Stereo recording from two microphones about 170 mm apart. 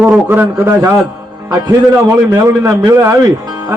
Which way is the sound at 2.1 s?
15° right (ahead or behind).